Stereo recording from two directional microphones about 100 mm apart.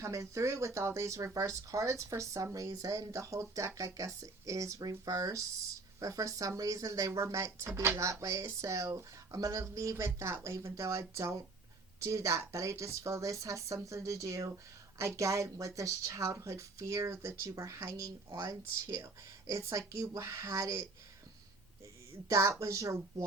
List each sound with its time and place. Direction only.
0.0 s speech: 30° right (ahead or behind)
22.3 s speech: 30° right (ahead or behind)